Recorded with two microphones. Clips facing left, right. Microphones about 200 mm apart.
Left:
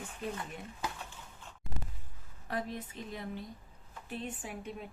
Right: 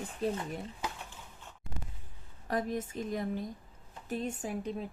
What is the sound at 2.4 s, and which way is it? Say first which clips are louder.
A woman's voice: right 5 dB; 45° right (ahead or behind).